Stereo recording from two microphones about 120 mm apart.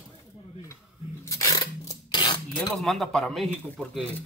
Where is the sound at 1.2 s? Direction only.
25° left (ahead or behind).